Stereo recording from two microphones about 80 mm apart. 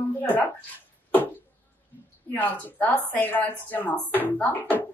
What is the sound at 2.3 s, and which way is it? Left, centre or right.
Speech, left.